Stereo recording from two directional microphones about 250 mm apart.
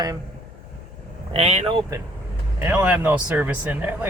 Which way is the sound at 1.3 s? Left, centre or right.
Right.